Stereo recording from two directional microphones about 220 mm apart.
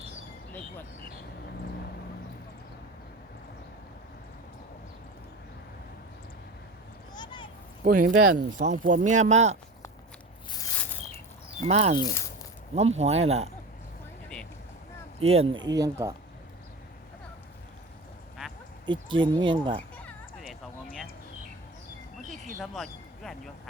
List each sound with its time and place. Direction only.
7.1 s a sound: 20° left (ahead or behind)
7.9 s speech: 40° right (ahead or behind)
11.7 s speech: 30° right (ahead or behind)
11.9 s speech: 15° left (ahead or behind)
12.7 s speech: 30° right (ahead or behind)
15.2 s speech: 30° right (ahead or behind)
15.6 s speech: 15° right (ahead or behind)
18.9 s speech: 20° right (ahead or behind)
22.6 s speech: centre (ahead or behind)